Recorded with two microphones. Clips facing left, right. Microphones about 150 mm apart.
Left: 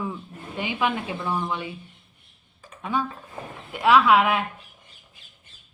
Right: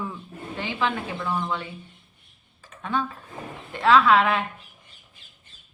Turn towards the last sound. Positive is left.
turn(degrees=10)  # may be behind; listen again after turning